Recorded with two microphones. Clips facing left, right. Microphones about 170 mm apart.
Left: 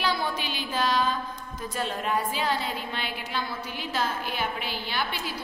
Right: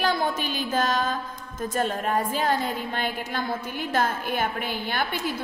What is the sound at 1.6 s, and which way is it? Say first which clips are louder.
A woman's voice: right 5 dB; 45° right (ahead or behind).